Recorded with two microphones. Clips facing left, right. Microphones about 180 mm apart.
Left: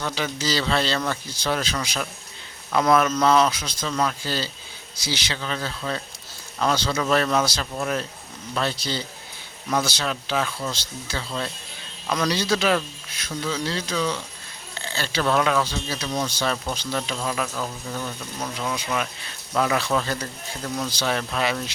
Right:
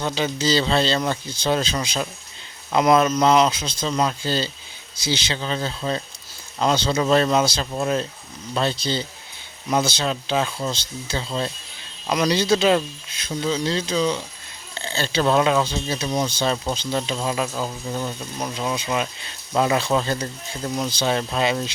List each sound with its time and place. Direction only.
0.0 s speech: 25° right (ahead or behind)